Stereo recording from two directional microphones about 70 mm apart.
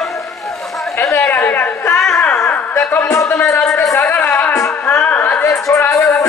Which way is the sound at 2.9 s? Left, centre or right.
Left.